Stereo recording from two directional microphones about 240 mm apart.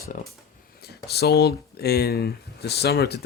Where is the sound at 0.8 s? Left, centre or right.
Left.